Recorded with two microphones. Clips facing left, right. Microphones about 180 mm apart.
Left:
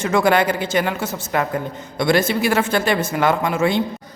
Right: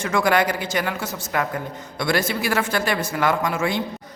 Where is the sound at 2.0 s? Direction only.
25° left (ahead or behind).